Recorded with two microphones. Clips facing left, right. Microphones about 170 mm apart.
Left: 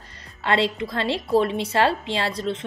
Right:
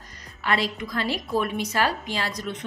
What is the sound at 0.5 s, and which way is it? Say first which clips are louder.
A woman's voice: left 4 dB; 30° left (ahead or behind).